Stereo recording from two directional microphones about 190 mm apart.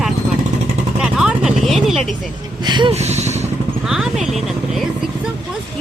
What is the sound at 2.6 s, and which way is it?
Speech, 25° right (ahead or behind).